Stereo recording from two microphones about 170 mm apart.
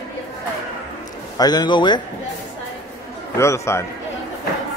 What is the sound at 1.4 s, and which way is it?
Speech, 25° left (ahead or behind).